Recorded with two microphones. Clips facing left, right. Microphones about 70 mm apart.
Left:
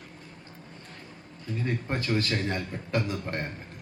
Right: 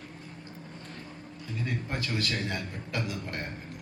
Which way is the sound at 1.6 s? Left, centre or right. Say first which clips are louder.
Left 3 dB; left.